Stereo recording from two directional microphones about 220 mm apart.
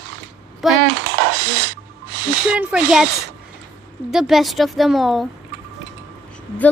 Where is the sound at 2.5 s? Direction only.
5° right (ahead or behind).